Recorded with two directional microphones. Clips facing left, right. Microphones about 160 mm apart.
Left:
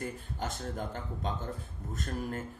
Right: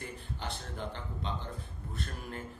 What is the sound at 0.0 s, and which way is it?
Speech, 40° left (ahead or behind).